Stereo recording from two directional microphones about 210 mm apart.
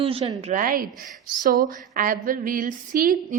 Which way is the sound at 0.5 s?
45° right (ahead or behind).